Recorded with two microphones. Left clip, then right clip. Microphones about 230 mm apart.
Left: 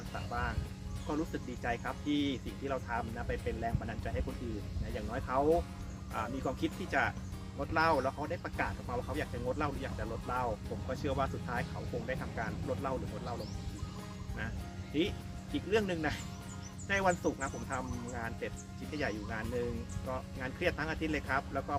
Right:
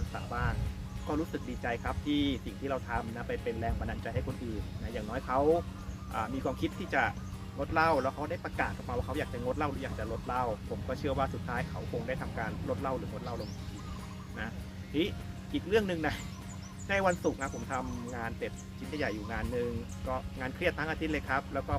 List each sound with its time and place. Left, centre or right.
0.3 s speech: centre
14.9 s speech: centre